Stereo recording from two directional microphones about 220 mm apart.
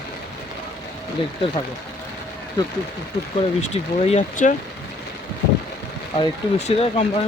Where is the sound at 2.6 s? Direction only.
20° left (ahead or behind).